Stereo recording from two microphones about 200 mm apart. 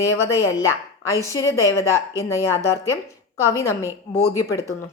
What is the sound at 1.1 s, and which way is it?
Speech, 15° left (ahead or behind).